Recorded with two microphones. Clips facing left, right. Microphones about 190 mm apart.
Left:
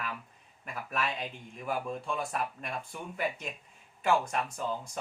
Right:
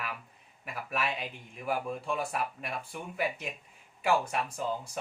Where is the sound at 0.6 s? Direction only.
10° right (ahead or behind).